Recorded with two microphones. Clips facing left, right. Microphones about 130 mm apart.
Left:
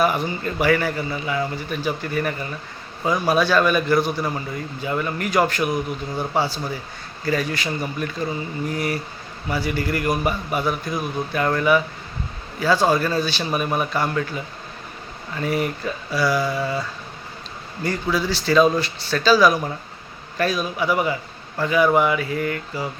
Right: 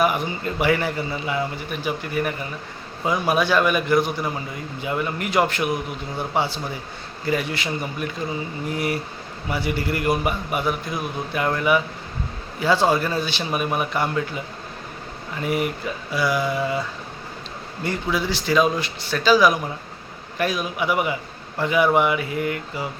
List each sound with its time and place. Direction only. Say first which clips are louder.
0.0 s a man's voice: left 1 dB; 15° right (ahead or behind)
17.8 s a man's voice: left 1 dB; 20° right (ahead or behind)